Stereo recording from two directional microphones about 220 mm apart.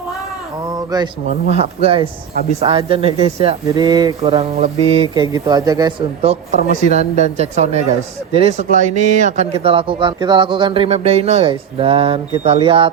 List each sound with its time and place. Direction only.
0.7 s a sound: 15° right (ahead or behind)
1.5 s speech: 30° right (ahead or behind)
6.5 s speech: 40° left (ahead or behind)
6.8 s speech: 30° right (ahead or behind)